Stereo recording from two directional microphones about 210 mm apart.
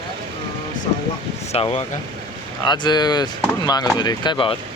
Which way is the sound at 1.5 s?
25° left (ahead or behind).